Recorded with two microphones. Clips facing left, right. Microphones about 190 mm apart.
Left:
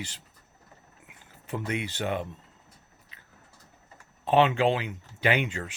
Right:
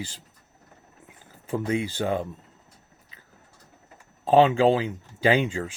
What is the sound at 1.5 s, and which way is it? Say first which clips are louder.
Speech: right 6 dB; 30° right (ahead or behind).